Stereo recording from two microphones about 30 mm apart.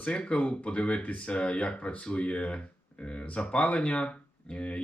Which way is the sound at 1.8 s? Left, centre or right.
Left.